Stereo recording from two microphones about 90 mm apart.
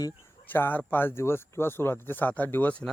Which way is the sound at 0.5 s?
25° left (ahead or behind).